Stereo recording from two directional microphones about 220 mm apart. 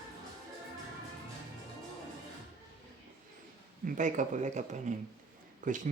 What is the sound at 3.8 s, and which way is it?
Speech, 35° right (ahead or behind).